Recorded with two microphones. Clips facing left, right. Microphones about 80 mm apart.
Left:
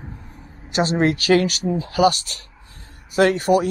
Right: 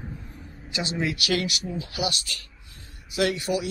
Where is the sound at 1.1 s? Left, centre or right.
Left.